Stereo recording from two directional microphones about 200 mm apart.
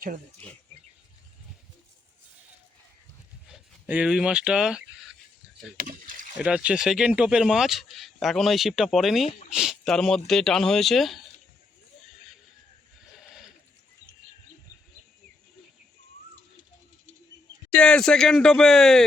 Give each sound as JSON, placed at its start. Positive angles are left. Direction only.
{"t": 3.4, "sound": "speech", "side_deg": -5}
{"t": 5.8, "sound": "rowboat", "side_deg": -45}
{"t": 6.4, "sound": "speech", "side_deg": -5}
{"t": 13.1, "sound": "a sound", "side_deg": 0}
{"t": 17.7, "sound": "speech", "side_deg": 5}